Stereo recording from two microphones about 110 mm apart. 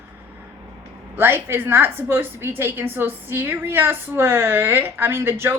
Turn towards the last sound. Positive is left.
turn(degrees=-20)  # may be behind; listen again after turning